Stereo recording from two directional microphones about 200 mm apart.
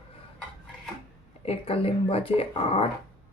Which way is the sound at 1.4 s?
30° left (ahead or behind).